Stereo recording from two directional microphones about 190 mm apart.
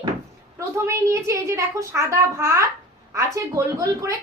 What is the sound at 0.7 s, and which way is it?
A woman's voice, 15° right (ahead or behind).